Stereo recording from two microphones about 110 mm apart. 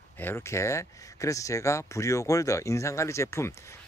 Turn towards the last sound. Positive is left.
turn(degrees=25)  # may be behind; listen again after turning